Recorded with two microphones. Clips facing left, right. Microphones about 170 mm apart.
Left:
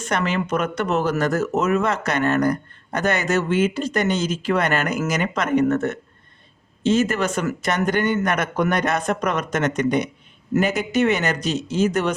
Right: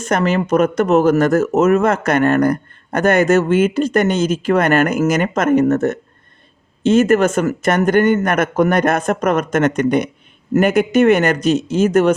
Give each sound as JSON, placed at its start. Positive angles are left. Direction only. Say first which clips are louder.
{"t": 0.0, "sound": "speech", "louder": "right 6 dB", "side_deg": -40}